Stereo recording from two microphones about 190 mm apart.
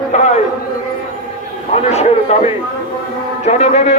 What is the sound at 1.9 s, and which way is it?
A man's voice, 35° left (ahead or behind).